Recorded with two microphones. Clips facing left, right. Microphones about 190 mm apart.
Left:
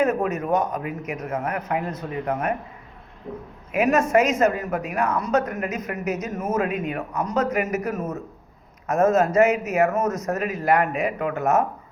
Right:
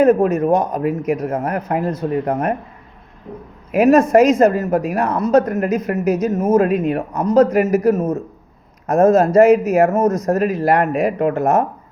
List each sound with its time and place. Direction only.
0.0 s a woman's voice: 30° right (ahead or behind)
3.7 s a woman's voice: 35° right (ahead or behind)